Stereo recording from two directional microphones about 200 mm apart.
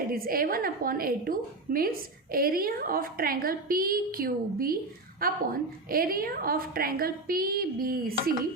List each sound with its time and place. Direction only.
0.1 s a woman's voice: 45° right (ahead or behind)